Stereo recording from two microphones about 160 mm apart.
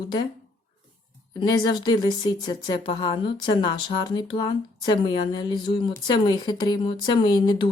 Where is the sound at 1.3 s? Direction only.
25° left (ahead or behind).